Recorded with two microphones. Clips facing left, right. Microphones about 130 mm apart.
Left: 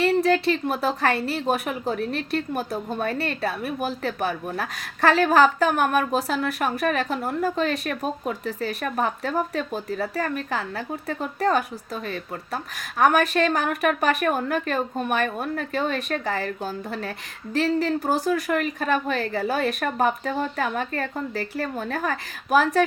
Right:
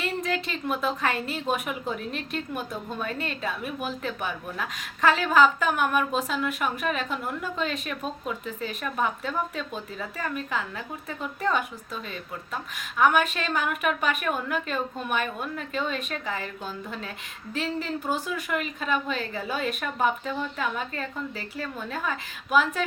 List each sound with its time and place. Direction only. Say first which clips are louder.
0.0 s a woman's voice: left 10 dB; 40° left (ahead or behind)